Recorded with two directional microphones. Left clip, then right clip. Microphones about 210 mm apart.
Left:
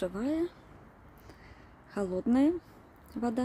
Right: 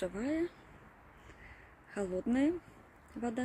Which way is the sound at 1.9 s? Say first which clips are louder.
Left 5 dB; 20° left (ahead or behind).